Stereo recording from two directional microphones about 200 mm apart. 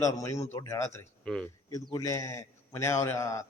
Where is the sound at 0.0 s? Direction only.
15° left (ahead or behind).